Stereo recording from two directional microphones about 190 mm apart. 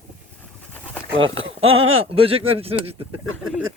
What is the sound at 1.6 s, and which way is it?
Speech, 90° right.